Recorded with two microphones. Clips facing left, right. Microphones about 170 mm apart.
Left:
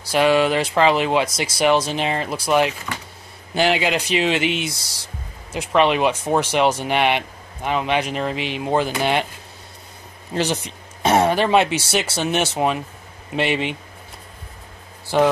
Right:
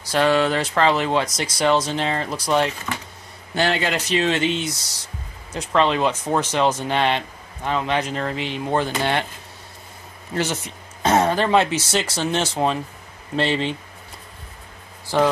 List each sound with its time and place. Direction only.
0.1 s speech: 15° left (ahead or behind)
10.3 s speech: 20° left (ahead or behind)
15.1 s speech: 15° left (ahead or behind)